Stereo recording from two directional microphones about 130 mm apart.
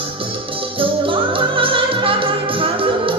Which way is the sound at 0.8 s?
45° right (ahead or behind).